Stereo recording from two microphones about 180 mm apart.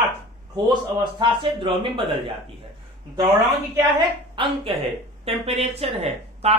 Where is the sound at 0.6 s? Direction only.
25° right (ahead or behind).